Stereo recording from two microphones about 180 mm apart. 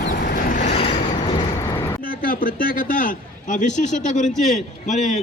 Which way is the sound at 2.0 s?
55° left (ahead or behind).